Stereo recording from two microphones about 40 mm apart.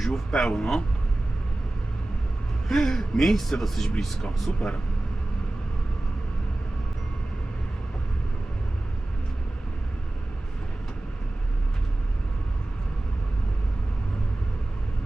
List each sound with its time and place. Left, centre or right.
0.0 s speech: centre
2.6 s speech: centre